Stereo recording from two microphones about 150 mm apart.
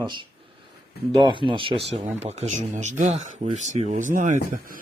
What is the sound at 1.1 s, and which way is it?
Speech, 35° right (ahead or behind).